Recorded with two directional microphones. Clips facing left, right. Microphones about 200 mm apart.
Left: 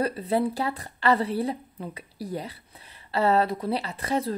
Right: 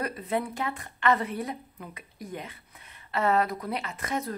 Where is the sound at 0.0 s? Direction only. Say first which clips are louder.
Left 5 dB; 30° left (ahead or behind).